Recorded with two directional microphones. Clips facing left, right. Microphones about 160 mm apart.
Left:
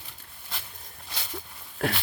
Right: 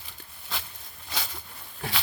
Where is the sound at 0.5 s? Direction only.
90° right.